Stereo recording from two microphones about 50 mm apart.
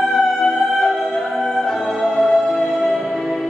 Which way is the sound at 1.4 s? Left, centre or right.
Centre.